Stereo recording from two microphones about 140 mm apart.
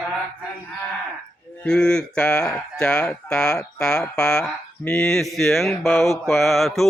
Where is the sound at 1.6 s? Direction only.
5° left (ahead or behind).